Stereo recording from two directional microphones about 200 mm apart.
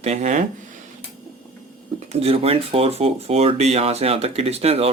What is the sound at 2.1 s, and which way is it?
Speech, 30° right (ahead or behind).